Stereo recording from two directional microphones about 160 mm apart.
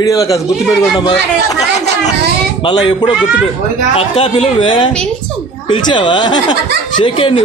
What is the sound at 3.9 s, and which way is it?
A man's voice, 35° left (ahead or behind).